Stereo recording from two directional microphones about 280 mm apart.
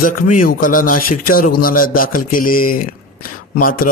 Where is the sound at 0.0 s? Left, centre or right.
Left.